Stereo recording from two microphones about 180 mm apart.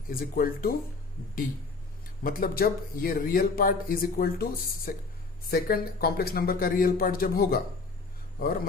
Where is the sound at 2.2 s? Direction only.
55° left (ahead or behind).